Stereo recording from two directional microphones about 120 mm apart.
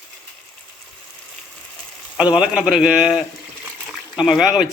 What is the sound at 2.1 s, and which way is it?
A man's voice, 10° right (ahead or behind).